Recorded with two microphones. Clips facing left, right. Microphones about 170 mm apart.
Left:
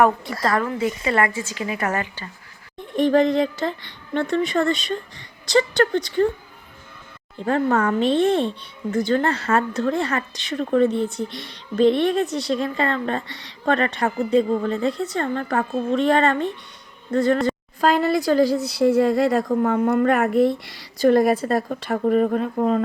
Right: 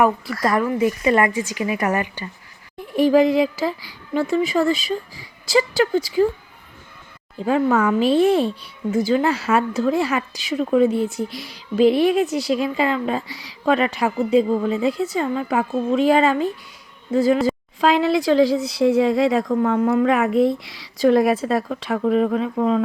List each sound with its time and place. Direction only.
0.4 s a woman's voice: 15° right (ahead or behind)
0.9 s speech: 25° left (ahead or behind)
1.1 s a woman's voice: 15° right (ahead or behind)
7.3 s speech: 5° right (ahead or behind)